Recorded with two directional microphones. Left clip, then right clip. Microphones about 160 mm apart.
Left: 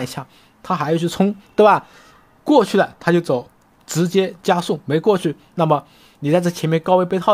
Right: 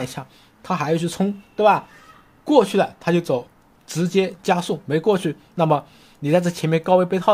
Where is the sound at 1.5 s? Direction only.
40° left (ahead or behind).